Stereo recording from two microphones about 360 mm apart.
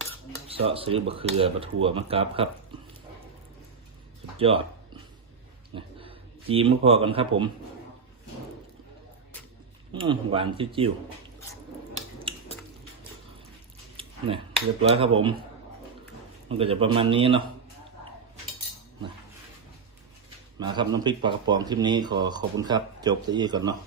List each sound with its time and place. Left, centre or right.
0.4 s speech: centre
4.4 s speech: centre
5.7 s speech: centre
9.9 s speech: centre
12.3 s a sound: centre
13.9 s a sound: centre
14.8 s speech: centre
16.5 s speech: centre
20.6 s speech: centre